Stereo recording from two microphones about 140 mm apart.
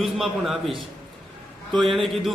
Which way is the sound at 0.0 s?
Centre (ahead or behind).